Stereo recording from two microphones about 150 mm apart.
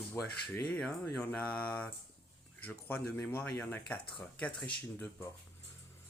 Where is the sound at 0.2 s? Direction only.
20° left (ahead or behind).